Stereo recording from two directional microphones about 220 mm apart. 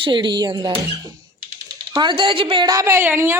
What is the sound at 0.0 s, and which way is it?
A woman's voice, 20° right (ahead or behind).